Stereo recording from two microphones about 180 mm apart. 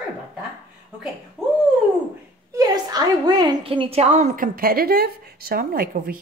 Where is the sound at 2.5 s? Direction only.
20° right (ahead or behind); by 6.1 s 55° right (ahead or behind).